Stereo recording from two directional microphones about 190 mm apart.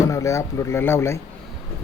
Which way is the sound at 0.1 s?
15° left (ahead or behind).